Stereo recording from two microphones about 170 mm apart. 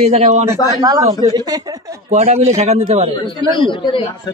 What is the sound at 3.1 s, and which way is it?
Speech, 30° left (ahead or behind).